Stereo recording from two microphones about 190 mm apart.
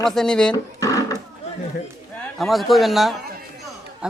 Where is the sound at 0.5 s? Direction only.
15° left (ahead or behind).